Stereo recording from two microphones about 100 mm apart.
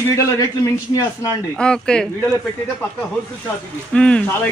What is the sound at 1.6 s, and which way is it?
Speech, 10° left (ahead or behind).